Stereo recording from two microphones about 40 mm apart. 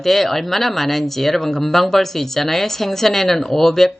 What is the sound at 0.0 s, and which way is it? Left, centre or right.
Speech, centre.